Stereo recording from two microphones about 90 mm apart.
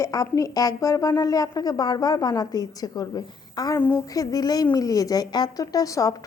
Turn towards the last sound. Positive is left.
turn(degrees=40)  # may be behind; listen again after turning